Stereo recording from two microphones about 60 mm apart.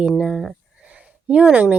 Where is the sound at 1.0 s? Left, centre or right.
Right.